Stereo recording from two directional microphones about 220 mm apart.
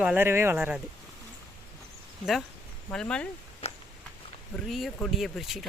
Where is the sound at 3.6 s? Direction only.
30° left (ahead or behind).